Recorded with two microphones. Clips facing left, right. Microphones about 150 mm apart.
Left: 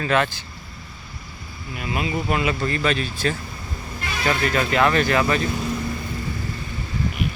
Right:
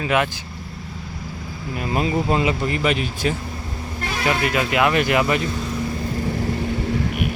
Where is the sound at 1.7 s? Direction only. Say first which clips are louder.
Right 4 dB; 40° right (ahead or behind); by 5.5 s 15° right (ahead or behind).